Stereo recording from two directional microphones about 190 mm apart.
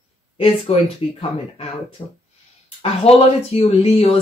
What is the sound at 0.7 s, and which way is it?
Speech, 30° left (ahead or behind).